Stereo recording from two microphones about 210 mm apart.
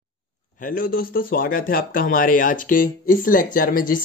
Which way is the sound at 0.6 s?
40° left (ahead or behind).